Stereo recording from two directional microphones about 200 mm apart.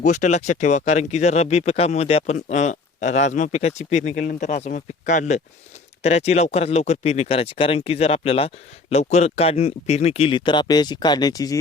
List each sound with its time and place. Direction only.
0.0 s speech: 35° left (ahead or behind); by 11.5 s 20° left (ahead or behind)